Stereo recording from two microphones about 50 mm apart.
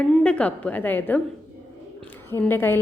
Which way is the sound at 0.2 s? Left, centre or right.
Left.